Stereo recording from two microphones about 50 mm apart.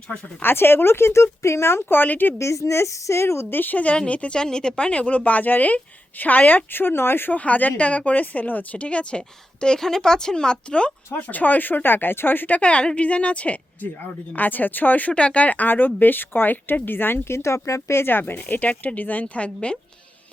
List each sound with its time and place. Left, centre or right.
0.4 s speech: left
2.4 s a woman's voice: left
3.5 s a woman's voice: left
3.9 s speech: left
6.7 s speech: left
7.3 s a woman's voice: left
11.1 s a woman's voice: left
12.5 s a woman's voice: left
15.1 s a woman's voice: left
17.3 s a woman's voice: left